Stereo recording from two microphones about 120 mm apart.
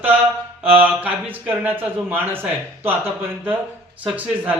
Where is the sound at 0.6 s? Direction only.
15° right (ahead or behind).